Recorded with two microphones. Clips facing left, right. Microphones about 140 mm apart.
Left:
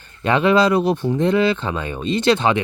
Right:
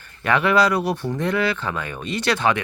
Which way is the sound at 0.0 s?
20° left (ahead or behind).